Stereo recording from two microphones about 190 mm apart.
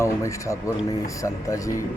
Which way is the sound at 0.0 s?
15° left (ahead or behind).